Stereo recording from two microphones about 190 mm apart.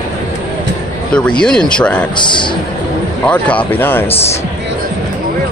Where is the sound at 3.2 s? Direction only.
5° left (ahead or behind).